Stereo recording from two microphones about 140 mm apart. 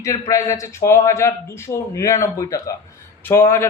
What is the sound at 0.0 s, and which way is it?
A man's voice, 20° left (ahead or behind).